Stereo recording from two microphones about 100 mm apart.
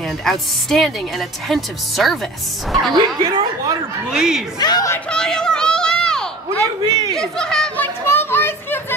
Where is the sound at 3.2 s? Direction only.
45° right (ahead or behind).